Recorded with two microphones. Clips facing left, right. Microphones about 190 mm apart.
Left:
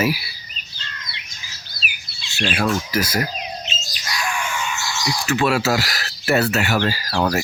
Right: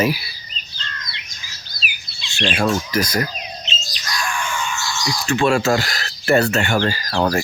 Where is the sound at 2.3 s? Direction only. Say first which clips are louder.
Right 1 dB; 5° left (ahead or behind).